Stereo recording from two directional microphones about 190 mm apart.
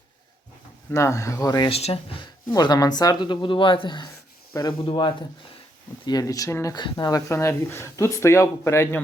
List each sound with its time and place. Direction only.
0.9 s speech: 15° left (ahead or behind); by 2.2 s 30° left (ahead or behind)
2.5 s speech: 20° left (ahead or behind)